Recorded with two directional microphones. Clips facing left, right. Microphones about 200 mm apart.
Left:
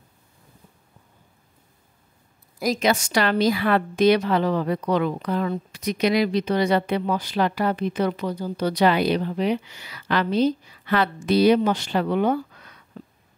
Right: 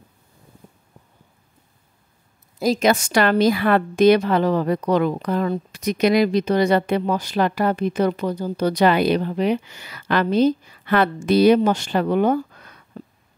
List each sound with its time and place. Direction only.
2.8 s a woman's voice: 50° right (ahead or behind)